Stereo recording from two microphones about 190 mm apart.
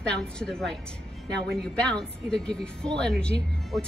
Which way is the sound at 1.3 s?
60° right (ahead or behind).